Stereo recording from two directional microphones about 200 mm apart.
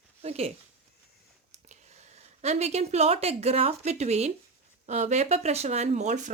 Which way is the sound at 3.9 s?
35° right (ahead or behind).